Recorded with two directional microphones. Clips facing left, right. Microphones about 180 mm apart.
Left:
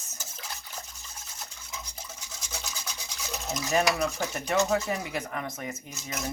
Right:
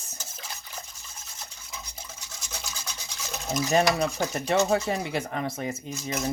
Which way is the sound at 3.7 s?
30° right (ahead or behind).